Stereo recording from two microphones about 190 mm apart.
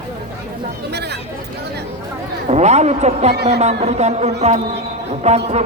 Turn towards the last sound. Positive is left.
turn(degrees=-35)  # may be behind; listen again after turning